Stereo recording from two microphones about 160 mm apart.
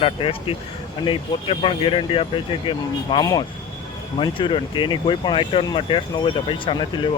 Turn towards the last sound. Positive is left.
turn(degrees=30)  # may be behind; listen again after turning